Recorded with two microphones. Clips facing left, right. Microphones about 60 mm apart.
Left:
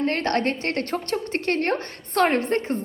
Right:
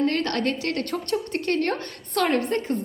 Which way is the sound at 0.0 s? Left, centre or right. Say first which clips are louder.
Left 1 dB; left.